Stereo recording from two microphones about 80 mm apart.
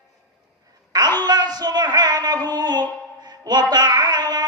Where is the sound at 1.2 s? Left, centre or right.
Right.